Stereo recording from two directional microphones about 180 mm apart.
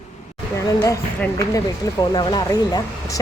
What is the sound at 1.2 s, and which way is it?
Speech, 15° left (ahead or behind).